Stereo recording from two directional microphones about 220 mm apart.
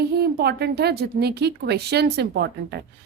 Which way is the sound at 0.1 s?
45° right (ahead or behind).